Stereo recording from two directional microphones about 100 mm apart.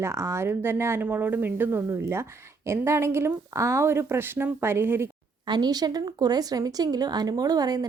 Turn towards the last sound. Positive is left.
turn(degrees=-40)  # may be behind; listen again after turning